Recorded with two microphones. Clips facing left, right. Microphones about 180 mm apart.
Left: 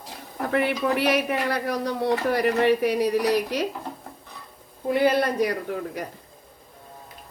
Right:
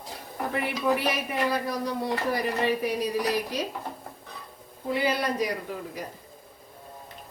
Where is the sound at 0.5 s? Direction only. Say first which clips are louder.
Left 4 dB; 70° left (ahead or behind).